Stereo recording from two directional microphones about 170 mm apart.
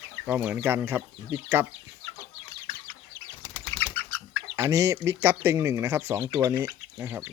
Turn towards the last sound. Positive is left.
turn(degrees=-15)  # may be behind; listen again after turning